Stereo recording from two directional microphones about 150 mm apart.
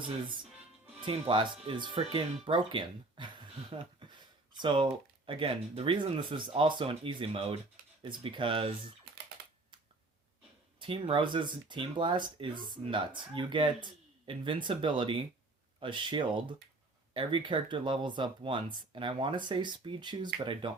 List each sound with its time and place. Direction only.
1.0 s speech: 35° right (ahead or behind)
10.8 s speech: 35° right (ahead or behind)